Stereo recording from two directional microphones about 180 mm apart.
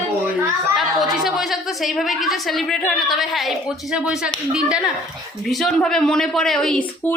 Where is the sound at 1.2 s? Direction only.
Centre (ahead or behind).